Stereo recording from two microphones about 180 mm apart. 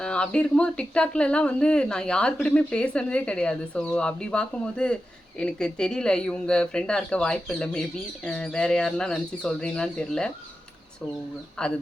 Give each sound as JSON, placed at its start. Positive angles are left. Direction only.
{"t": 0.0, "sound": "speech", "side_deg": 5}
{"t": 11.6, "sound": "speech", "side_deg": 5}